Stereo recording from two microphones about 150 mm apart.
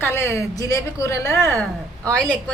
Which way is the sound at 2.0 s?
5° left (ahead or behind).